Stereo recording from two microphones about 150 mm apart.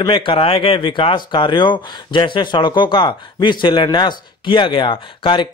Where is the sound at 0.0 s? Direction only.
35° left (ahead or behind).